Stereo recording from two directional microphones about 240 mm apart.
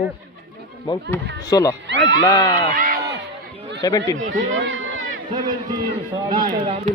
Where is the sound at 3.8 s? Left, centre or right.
Centre.